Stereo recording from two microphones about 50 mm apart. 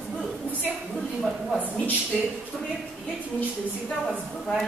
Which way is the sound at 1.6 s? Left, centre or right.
Left.